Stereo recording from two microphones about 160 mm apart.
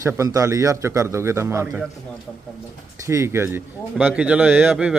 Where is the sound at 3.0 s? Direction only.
20° right (ahead or behind).